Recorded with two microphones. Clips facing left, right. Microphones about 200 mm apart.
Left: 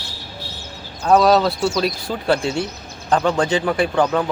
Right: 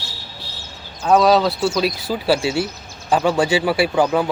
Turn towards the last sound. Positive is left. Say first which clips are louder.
# right 1 dB
turn(degrees=-10)  # may be behind; listen again after turning